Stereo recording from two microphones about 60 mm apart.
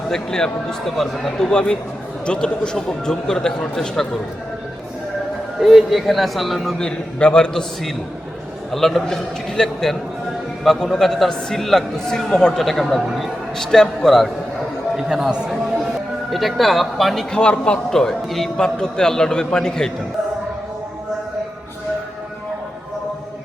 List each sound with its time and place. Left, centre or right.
0.1 s a man's voice: centre
5.6 s a man's voice: centre
6.7 s a man's voice: centre
8.7 s a man's voice: centre
14.9 s a man's voice: centre
17.3 s a man's voice: centre